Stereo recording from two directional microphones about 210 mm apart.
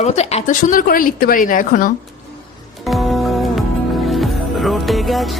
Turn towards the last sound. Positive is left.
turn(degrees=0)  # may be behind; listen again after turning